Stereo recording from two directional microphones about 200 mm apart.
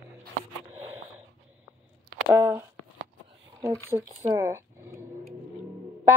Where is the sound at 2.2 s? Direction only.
10° right (ahead or behind).